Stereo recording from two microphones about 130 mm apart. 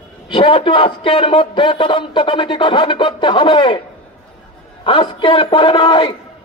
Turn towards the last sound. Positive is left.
turn(degrees=40)  # may be behind; listen again after turning